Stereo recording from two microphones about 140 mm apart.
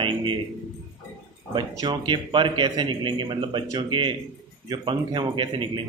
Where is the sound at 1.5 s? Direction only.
30° right (ahead or behind).